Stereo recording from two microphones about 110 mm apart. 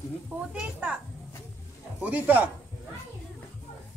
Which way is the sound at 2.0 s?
15° right (ahead or behind).